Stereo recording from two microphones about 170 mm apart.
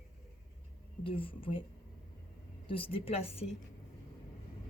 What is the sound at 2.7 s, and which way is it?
Speech, 30° left (ahead or behind).